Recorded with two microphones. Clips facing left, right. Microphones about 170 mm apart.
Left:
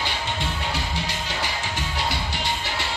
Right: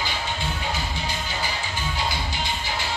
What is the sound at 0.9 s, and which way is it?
Music, 80° left.